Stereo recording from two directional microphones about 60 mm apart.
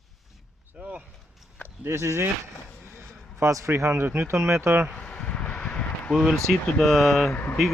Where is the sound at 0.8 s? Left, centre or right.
Right.